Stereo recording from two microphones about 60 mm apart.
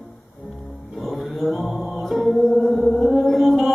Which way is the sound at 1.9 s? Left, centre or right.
Centre.